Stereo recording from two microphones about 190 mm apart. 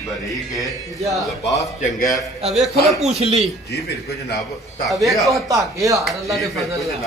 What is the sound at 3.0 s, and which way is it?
Speech, 35° right (ahead or behind).